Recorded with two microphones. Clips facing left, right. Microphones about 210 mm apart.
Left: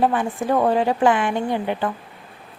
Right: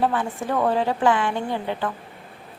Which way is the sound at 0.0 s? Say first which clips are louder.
Left 3 dB; 15° left (ahead or behind).